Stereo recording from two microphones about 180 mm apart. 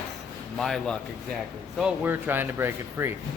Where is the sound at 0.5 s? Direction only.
Centre (ahead or behind).